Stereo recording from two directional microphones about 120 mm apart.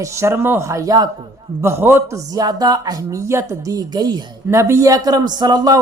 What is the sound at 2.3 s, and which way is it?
A man's voice, 35° right (ahead or behind).